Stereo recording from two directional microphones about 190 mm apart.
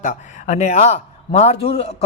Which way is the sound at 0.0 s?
40° left (ahead or behind).